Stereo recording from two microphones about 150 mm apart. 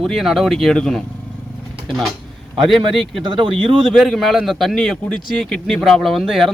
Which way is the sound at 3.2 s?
30° right (ahead or behind).